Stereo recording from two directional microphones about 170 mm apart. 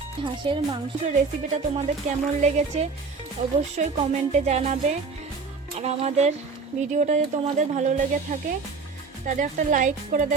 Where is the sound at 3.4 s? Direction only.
45° right (ahead or behind).